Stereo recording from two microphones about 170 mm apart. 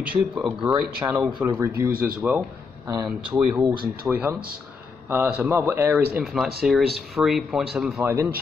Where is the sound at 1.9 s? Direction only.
60° right (ahead or behind).